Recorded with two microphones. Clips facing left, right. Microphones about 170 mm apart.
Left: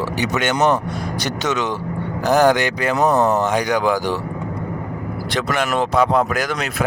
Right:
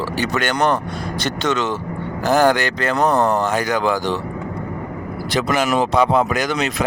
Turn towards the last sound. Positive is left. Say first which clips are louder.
# right 1 dB
turn(degrees=0)  # may be behind; listen again after turning